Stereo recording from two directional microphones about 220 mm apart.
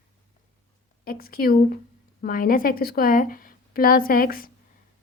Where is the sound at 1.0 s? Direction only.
40° left (ahead or behind).